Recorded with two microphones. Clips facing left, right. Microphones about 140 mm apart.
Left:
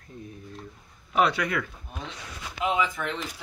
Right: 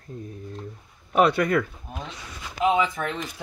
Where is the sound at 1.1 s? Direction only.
50° right (ahead or behind).